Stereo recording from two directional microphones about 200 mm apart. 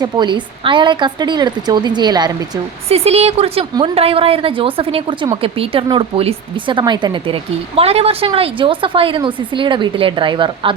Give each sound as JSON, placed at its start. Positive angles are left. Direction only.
{"t": 0.0, "sound": "a woman's voice", "side_deg": -20}
{"t": 2.9, "sound": "a woman's voice", "side_deg": -30}